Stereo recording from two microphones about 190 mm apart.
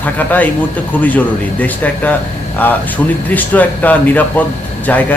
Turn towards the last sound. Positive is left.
turn(degrees=10)  # may be behind; listen again after turning